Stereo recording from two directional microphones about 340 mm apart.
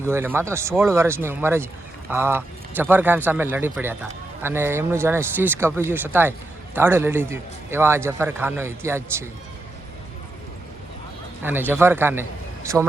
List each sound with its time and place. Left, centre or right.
0.0 s a man's voice: centre
11.4 s a man's voice: centre